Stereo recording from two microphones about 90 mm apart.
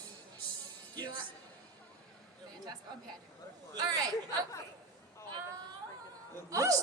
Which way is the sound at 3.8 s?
45° right (ahead or behind).